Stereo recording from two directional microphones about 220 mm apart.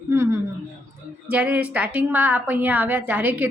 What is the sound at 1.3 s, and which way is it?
A woman's voice, 5° right (ahead or behind).